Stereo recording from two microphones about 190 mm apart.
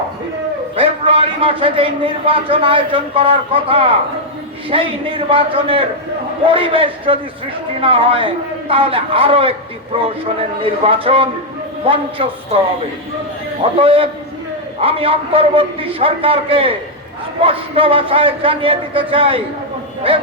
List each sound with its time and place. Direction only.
0.8 s a man's voice: 30° right (ahead or behind)
10.6 s a man's voice: 30° right (ahead or behind)
13.7 s a man's voice: 30° right (ahead or behind)